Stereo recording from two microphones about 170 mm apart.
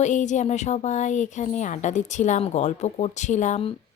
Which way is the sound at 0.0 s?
45° left (ahead or behind).